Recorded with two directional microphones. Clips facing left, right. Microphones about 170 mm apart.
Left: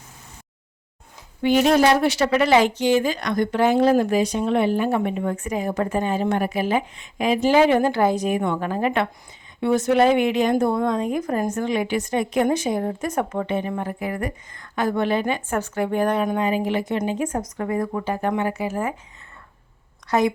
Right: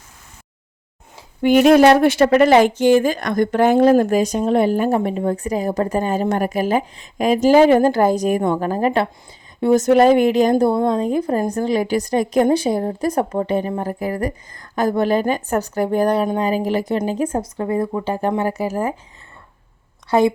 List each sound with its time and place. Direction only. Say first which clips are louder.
1.4 s speech: right 6 dB; 55° right (ahead or behind); by 18.9 s 35° right (ahead or behind)
20.1 s a woman's voice: right 5 dB; 30° right (ahead or behind)